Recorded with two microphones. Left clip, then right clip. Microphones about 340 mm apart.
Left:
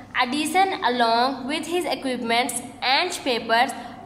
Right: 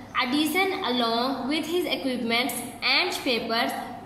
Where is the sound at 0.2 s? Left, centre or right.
Left.